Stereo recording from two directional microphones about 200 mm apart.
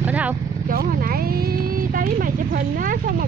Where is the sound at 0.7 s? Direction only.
45° right (ahead or behind).